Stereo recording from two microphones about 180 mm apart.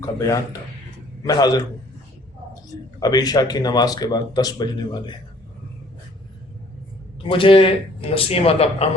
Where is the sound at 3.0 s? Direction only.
20° left (ahead or behind).